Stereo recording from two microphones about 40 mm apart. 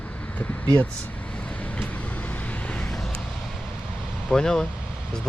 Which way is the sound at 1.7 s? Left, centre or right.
Left.